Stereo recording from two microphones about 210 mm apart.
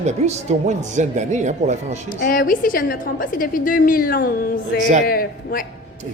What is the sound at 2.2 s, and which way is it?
A woman's voice, 40° left (ahead or behind).